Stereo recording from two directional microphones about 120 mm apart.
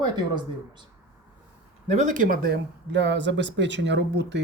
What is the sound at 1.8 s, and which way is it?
Speech, 80° right.